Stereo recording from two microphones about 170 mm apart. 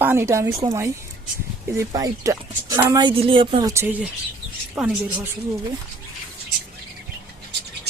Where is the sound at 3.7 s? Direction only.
15° right (ahead or behind).